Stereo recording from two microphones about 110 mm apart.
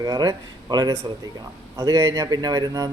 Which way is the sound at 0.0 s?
35° right (ahead or behind).